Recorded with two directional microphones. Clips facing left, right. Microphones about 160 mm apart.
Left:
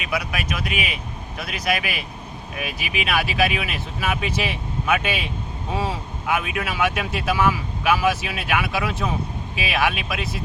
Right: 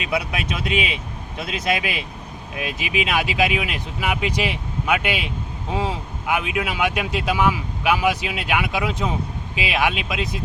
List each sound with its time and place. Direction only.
0.0 s speech: 25° right (ahead or behind)